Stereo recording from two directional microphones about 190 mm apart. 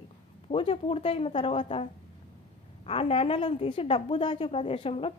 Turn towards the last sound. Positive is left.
turn(degrees=30)  # may be behind; listen again after turning